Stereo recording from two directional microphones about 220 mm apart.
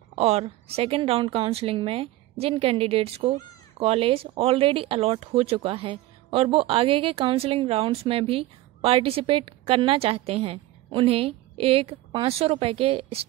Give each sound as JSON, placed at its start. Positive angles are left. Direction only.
{"t": 0.1, "sound": "a woman's voice", "side_deg": -30}